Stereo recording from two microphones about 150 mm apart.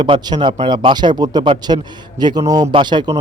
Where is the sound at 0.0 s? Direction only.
30° right (ahead or behind).